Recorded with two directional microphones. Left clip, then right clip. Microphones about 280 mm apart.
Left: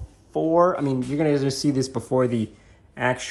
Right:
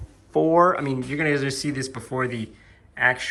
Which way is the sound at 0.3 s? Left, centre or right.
Centre.